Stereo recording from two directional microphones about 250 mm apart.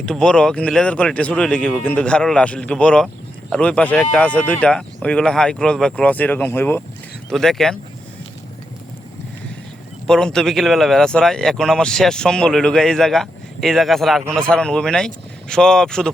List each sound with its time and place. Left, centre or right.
0.0 s speech: centre
10.1 s speech: centre